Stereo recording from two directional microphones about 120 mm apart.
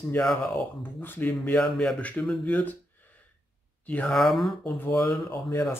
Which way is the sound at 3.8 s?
10° left (ahead or behind).